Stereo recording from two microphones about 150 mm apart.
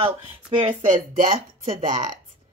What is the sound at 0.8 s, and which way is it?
Speech, 60° right (ahead or behind).